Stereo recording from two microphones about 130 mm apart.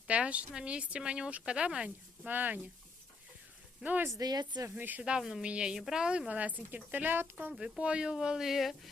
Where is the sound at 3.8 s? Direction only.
15° right (ahead or behind).